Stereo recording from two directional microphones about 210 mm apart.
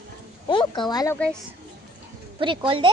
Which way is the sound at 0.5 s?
20° left (ahead or behind).